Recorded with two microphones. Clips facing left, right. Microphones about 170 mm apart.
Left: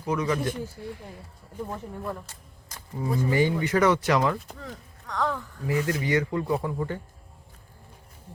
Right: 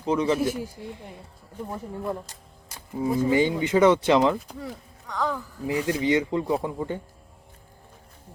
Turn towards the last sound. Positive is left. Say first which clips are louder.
# right 1 dB
turn(degrees=-20)  # may be behind; listen again after turning